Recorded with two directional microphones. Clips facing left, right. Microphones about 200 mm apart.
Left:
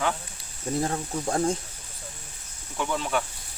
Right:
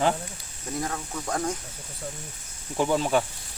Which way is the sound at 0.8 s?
30° left (ahead or behind).